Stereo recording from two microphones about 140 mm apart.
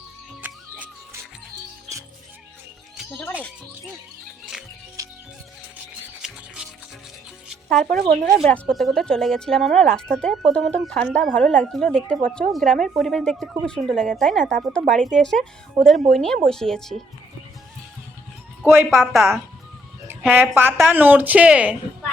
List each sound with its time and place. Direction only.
0.4 s music: 10° right (ahead or behind)
3.0 s speech: 10° left (ahead or behind)
7.4 s music: centre (ahead or behind)
7.9 s speech: 90° right
8.4 s a woman's voice: 10° left (ahead or behind)
15.8 s speech: 50° right (ahead or behind)
16.1 s a woman's voice: 5° left (ahead or behind)
18.6 s speech: 15° right (ahead or behind)
18.9 s a woman's voice: centre (ahead or behind)
20.3 s speech: 10° right (ahead or behind)